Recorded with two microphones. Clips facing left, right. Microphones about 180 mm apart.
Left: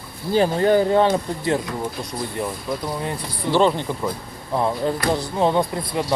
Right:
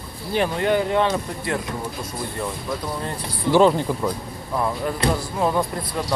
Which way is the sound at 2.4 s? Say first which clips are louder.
Left 2 dB; 15° left (ahead or behind).